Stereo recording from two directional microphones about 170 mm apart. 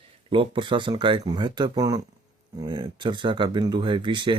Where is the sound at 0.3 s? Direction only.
30° right (ahead or behind).